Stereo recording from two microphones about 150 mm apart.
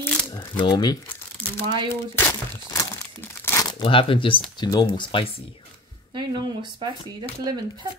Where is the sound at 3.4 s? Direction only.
20° left (ahead or behind).